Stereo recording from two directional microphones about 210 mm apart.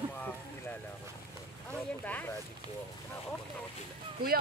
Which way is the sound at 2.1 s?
10° left (ahead or behind).